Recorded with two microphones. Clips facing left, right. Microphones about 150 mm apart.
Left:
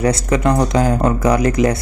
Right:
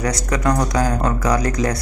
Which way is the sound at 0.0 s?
25° left (ahead or behind).